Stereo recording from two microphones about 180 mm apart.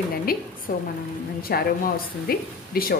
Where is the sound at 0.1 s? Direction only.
55° left (ahead or behind).